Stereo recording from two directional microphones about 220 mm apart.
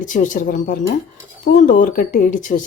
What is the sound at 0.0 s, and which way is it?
Speech, 35° left (ahead or behind).